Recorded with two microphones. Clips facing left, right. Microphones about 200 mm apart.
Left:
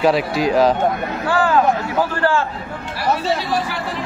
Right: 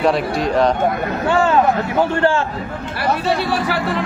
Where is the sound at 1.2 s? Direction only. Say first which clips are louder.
Right 1 dB; 25° right (ahead or behind).